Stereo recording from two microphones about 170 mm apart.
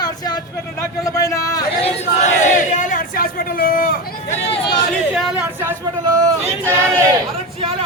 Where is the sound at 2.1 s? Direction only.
45° left (ahead or behind).